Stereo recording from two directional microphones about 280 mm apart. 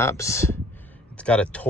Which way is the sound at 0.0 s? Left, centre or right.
Centre.